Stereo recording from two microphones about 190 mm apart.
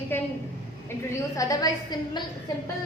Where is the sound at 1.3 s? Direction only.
20° left (ahead or behind).